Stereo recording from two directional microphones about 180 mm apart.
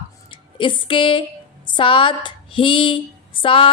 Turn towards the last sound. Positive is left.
turn(degrees=30)  # may be behind; listen again after turning